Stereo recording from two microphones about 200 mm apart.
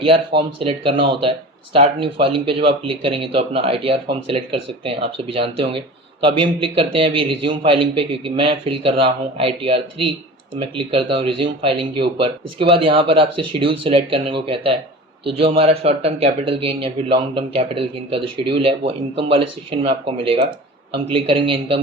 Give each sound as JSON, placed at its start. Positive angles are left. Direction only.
{"t": 0.0, "sound": "speech", "side_deg": -25}